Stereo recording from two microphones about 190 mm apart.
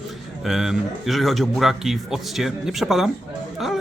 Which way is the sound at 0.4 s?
Centre (ahead or behind).